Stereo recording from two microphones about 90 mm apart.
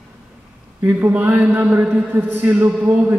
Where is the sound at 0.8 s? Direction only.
20° right (ahead or behind).